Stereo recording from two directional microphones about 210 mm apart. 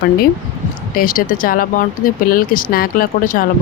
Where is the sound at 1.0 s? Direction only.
45° left (ahead or behind).